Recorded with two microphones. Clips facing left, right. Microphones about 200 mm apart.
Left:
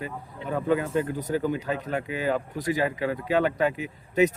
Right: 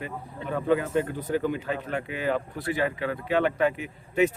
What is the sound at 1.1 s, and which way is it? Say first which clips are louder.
Speech: even; 40° left (ahead or behind).